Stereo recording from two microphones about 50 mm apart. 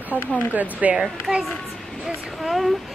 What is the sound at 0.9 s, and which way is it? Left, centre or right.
Speech, centre.